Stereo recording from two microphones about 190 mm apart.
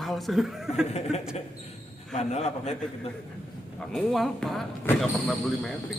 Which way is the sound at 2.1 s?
35° left (ahead or behind).